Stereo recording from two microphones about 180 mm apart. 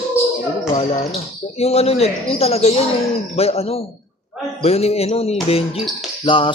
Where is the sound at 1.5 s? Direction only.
35° left (ahead or behind).